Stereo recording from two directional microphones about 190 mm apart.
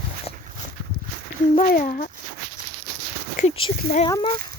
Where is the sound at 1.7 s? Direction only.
45° left (ahead or behind).